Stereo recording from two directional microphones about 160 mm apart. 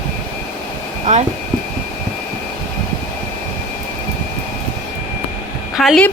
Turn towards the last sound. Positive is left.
turn(degrees=0)  # may be behind; listen again after turning